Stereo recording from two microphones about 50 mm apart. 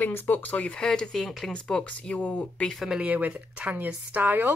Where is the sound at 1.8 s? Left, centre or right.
Left.